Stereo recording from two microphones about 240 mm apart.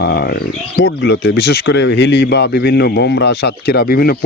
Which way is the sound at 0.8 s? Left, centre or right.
Left.